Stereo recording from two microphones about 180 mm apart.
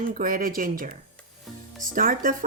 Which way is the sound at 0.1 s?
50° right (ahead or behind).